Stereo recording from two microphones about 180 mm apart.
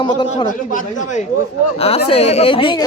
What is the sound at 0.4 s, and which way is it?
Speech, 45° left (ahead or behind).